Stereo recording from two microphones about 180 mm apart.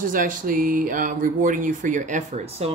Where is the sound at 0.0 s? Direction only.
50° right (ahead or behind).